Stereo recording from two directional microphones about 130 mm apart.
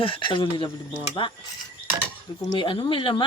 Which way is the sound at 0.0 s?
40° left (ahead or behind).